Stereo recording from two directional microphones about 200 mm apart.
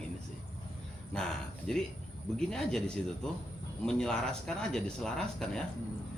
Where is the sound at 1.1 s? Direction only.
5° left (ahead or behind).